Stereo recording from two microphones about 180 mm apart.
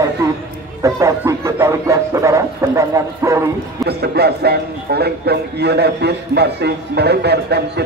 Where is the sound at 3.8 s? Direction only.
65° right (ahead or behind).